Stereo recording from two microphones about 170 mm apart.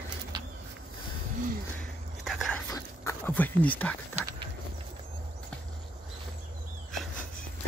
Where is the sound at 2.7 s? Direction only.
15° left (ahead or behind).